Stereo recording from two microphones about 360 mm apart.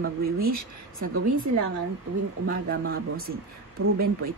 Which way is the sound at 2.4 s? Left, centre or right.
Right.